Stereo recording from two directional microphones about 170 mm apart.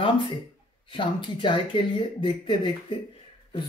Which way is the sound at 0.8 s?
30° left (ahead or behind).